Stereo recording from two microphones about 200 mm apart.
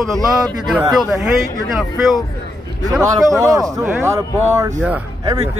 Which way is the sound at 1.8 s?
Centre (ahead or behind).